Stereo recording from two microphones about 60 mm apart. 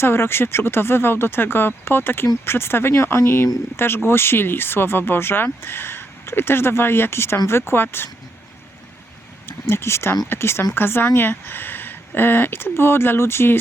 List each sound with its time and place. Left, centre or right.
0.0 s speech: left
9.5 s speech: left